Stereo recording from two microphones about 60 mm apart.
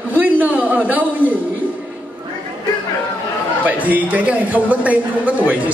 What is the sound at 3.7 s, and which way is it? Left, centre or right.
A woman's voice, right.